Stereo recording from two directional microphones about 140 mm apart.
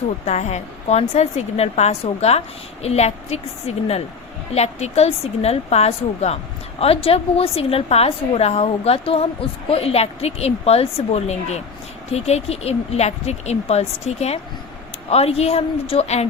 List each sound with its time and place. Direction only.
0.3 s a woman's voice: 55° left (ahead or behind)